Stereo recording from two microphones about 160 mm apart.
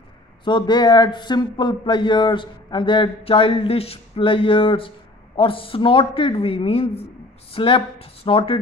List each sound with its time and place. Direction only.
0.5 s a man's voice: 30° left (ahead or behind)